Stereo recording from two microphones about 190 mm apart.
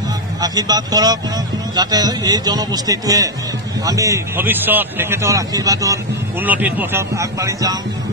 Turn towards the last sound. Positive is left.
turn(degrees=-15)  # may be behind; listen again after turning